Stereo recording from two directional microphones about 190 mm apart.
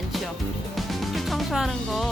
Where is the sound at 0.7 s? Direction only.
Centre (ahead or behind).